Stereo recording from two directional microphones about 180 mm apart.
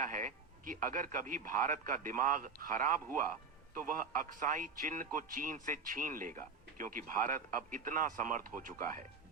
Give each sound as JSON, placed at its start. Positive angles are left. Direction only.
{"t": 0.0, "sound": "a man's voice", "side_deg": -45}